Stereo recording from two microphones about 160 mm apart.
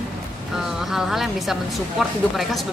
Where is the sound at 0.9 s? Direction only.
Centre (ahead or behind).